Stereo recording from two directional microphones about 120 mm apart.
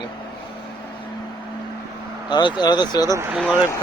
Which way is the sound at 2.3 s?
40° left (ahead or behind).